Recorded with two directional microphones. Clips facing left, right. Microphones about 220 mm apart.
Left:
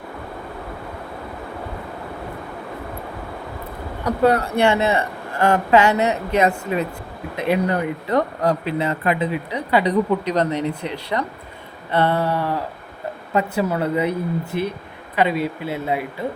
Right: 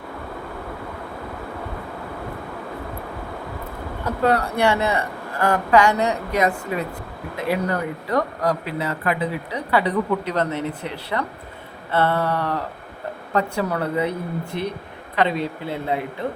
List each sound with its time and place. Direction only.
4.0 s speech: 20° left (ahead or behind)
13.7 s speech: 15° left (ahead or behind)
15.1 s speech: 10° left (ahead or behind)